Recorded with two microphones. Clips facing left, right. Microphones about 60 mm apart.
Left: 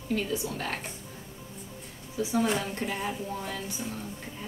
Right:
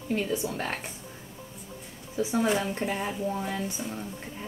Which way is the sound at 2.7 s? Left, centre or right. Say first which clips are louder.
Right 2 dB; centre.